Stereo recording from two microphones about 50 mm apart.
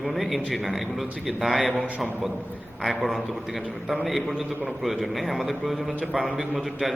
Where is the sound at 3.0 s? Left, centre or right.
Centre.